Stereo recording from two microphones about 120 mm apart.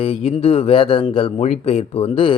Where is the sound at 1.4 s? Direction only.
65° left (ahead or behind).